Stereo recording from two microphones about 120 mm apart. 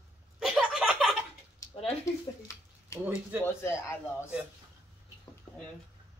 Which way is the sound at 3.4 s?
20° left (ahead or behind).